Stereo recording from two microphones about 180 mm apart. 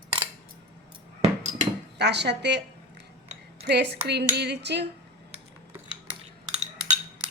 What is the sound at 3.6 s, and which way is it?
Speech, 70° right (ahead or behind).